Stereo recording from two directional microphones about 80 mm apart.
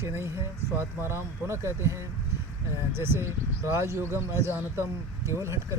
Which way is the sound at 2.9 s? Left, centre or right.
Right.